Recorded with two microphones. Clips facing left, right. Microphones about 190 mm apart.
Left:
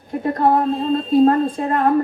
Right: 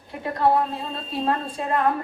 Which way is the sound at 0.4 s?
45° left (ahead or behind).